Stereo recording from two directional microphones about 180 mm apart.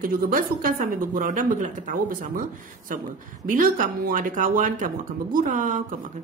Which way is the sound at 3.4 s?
50° right (ahead or behind).